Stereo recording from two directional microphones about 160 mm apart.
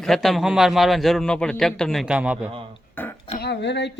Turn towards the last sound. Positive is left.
turn(degrees=90)